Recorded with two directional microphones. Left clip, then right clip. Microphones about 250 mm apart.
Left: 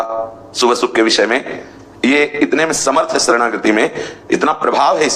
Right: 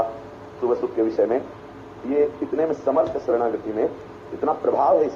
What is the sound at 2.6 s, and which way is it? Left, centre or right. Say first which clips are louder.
A man's voice: left 4 dB; left.